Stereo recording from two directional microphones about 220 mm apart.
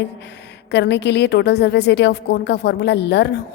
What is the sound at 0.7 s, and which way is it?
A woman's voice, 50° left (ahead or behind).